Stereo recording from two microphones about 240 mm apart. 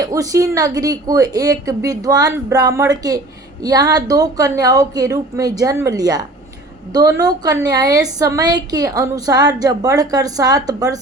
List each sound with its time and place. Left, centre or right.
0.0 s a woman's voice: centre